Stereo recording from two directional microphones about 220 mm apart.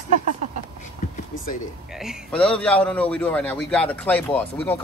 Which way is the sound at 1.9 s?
Centre (ahead or behind).